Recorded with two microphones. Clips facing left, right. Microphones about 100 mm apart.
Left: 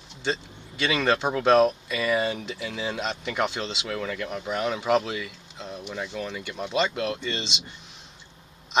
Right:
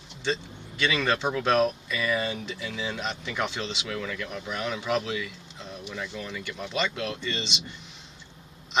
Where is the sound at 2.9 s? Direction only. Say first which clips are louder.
Left 3 dB; 15° left (ahead or behind).